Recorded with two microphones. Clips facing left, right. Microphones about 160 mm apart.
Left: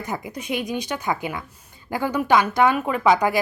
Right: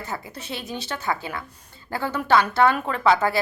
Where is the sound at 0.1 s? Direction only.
15° left (ahead or behind).